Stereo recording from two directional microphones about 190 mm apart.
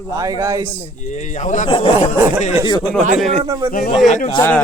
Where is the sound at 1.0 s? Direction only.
40° left (ahead or behind).